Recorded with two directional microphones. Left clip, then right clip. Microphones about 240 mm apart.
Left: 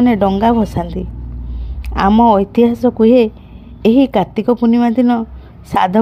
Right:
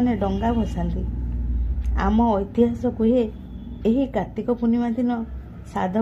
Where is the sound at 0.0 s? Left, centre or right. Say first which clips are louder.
Left 11 dB; left.